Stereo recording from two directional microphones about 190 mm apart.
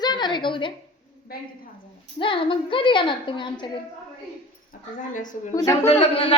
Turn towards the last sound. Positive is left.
turn(degrees=30)  # may be behind; listen again after turning